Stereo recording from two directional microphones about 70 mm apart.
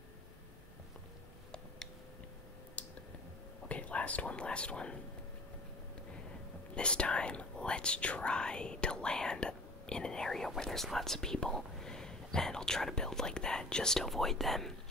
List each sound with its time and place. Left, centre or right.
2.8 s clicking: left
3.6 s speech: centre
6.7 s speech: centre